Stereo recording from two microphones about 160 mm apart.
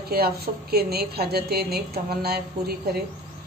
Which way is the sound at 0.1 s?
75° right (ahead or behind).